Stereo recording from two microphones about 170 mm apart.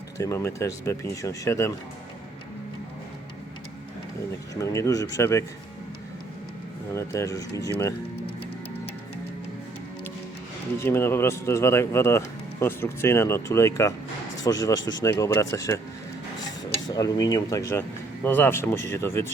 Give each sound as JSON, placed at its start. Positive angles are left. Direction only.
{"t": 0.2, "sound": "speech", "side_deg": 20}
{"t": 4.5, "sound": "speech", "side_deg": 15}
{"t": 6.9, "sound": "speech", "side_deg": 15}
{"t": 10.8, "sound": "speech", "side_deg": 15}
{"t": 16.8, "sound": "speech", "side_deg": 20}